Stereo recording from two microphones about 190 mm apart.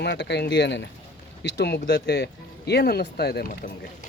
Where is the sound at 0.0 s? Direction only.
65° left (ahead or behind).